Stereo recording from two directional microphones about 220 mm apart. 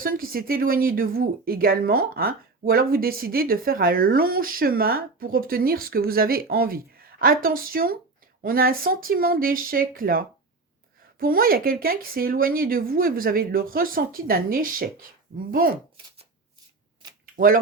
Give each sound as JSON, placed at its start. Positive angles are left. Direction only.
{"t": 0.0, "sound": "a woman's voice", "side_deg": -40}
{"t": 17.3, "sound": "speech", "side_deg": -40}